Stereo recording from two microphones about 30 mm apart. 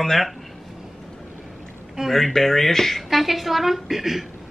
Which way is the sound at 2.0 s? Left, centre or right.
Right.